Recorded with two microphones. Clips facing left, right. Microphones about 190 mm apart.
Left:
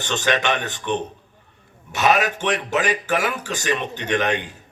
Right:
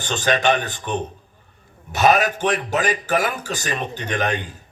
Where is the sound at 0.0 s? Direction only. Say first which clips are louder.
Right 2 dB; 35° right (ahead or behind).